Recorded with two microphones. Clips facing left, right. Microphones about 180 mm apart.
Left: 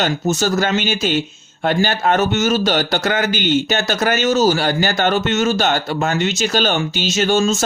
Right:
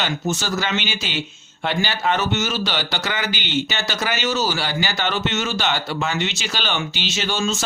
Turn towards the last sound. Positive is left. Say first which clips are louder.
# left 8 dB
turn(degrees=45)  # may be behind; listen again after turning